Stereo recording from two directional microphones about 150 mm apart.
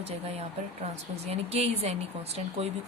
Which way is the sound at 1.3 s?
45° right (ahead or behind).